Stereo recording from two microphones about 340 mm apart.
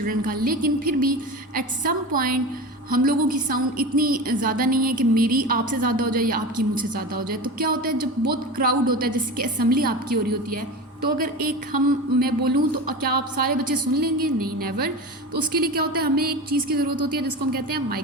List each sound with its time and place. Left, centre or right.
0.0 s a woman's voice: right